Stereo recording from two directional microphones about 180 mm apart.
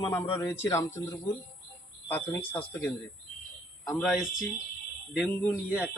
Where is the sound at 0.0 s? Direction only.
15° left (ahead or behind); by 4.4 s centre (ahead or behind).